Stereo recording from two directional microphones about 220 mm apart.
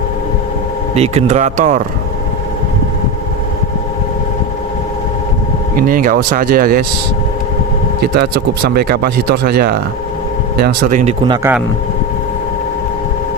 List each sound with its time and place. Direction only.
0.9 s speech: 30° right (ahead or behind)
5.7 s speech: 40° right (ahead or behind)
8.0 s speech: 45° right (ahead or behind)